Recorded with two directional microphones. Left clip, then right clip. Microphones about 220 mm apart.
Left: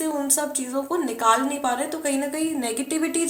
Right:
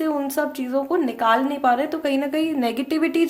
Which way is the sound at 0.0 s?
40° right (ahead or behind).